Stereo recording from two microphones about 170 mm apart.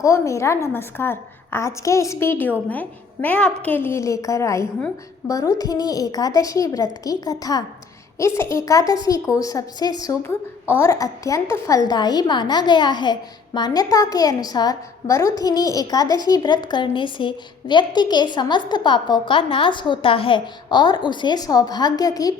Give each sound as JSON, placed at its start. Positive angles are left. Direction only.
{"t": 0.0, "sound": "a woman's voice", "side_deg": 15}